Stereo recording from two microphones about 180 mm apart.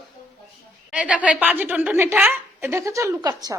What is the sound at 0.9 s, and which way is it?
A woman's voice, 5° right (ahead or behind).